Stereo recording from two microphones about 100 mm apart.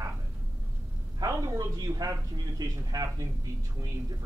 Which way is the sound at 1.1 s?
40° right (ahead or behind).